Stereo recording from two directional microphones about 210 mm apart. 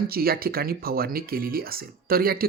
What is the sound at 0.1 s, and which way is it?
Speech, 45° right (ahead or behind).